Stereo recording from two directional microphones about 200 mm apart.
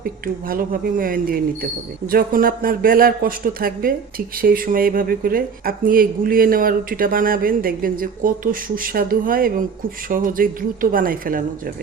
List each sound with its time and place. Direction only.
0.0 s speech: 45° right (ahead or behind)